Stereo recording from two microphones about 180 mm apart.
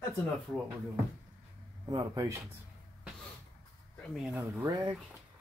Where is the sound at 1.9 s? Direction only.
20° right (ahead or behind).